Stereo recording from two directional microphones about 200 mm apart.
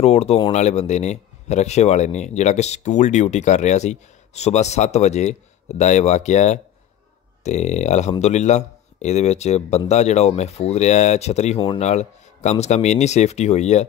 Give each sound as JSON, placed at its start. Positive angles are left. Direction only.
{"t": 0.0, "sound": "speech", "side_deg": 30}
{"t": 11.5, "sound": "speech", "side_deg": 20}
{"t": 11.8, "sound": "speech", "side_deg": 35}